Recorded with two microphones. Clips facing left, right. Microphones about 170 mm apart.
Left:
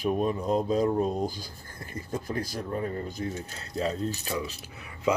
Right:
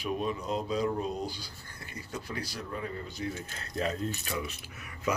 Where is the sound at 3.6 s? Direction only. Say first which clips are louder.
Left 3 dB; 25° left (ahead or behind).